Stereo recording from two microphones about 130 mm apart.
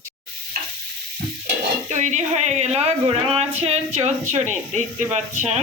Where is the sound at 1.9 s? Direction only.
65° right (ahead or behind).